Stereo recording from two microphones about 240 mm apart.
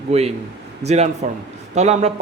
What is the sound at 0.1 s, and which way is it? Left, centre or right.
Speech, right.